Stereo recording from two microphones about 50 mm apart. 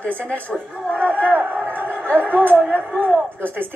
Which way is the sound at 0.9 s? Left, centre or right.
Right.